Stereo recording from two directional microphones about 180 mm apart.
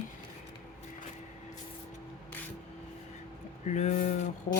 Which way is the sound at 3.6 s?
40° left (ahead or behind).